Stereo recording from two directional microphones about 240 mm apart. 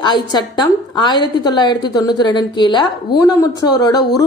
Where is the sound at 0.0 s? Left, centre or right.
Centre.